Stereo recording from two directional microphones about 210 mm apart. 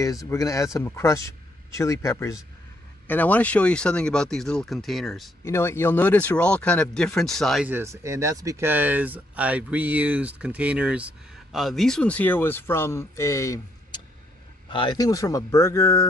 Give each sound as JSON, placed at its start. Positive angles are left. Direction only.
{"t": 0.3, "sound": "speech", "side_deg": 15}
{"t": 5.4, "sound": "speech", "side_deg": 10}